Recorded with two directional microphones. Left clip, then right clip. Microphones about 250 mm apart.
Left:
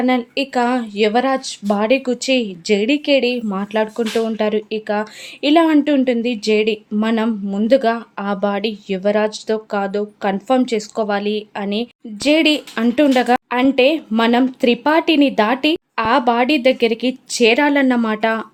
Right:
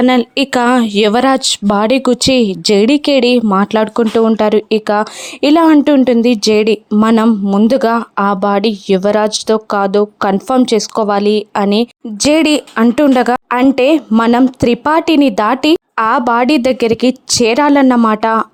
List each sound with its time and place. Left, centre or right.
0.0 s speech: right